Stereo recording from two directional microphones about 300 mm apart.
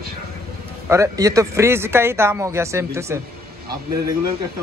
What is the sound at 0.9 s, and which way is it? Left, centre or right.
Speech, centre.